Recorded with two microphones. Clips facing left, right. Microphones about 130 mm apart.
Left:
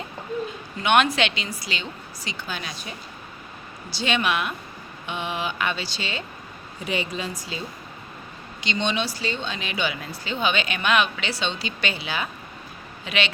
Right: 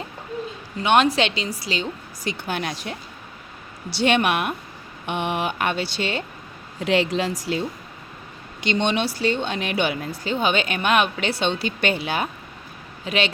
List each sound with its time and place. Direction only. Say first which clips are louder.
0.8 s a woman's voice: right 2 dB; 35° right (ahead or behind)
2.2 s speech: right 7 dB; 60° right (ahead or behind)
6.7 s a woman's voice: right 8 dB; 90° right
8.6 s speech: right 4 dB; 55° right (ahead or behind)
13.1 s a woman's voice: right 3 dB; 40° right (ahead or behind)